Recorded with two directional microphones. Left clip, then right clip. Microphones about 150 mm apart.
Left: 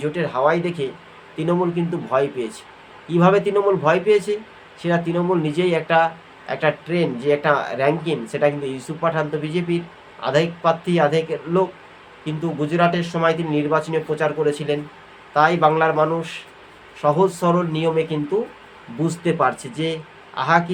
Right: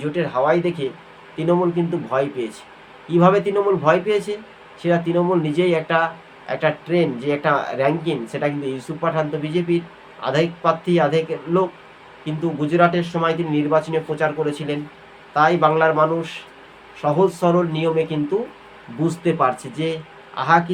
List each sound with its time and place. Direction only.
0.0 s a man's voice: 10° left (ahead or behind)